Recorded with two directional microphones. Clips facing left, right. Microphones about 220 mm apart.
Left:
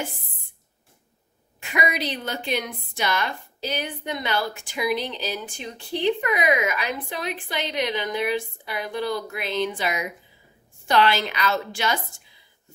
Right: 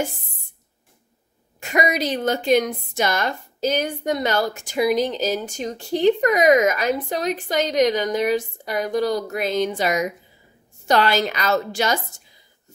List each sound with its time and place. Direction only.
1.6 s a woman's voice: 45° right (ahead or behind)